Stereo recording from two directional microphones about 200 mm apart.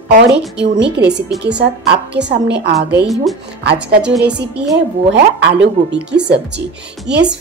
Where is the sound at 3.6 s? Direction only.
55° right (ahead or behind).